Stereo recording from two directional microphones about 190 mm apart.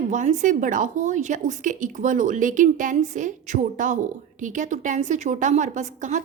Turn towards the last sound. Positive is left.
turn(degrees=-40)  # may be behind; listen again after turning